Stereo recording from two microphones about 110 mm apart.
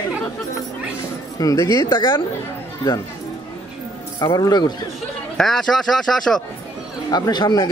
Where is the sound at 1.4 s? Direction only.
30° left (ahead or behind).